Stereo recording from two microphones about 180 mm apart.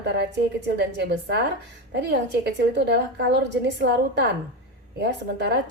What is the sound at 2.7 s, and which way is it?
A woman's voice, 75° right (ahead or behind).